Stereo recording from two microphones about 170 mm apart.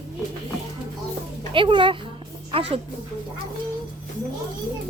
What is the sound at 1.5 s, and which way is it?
Speech, 30° right (ahead or behind).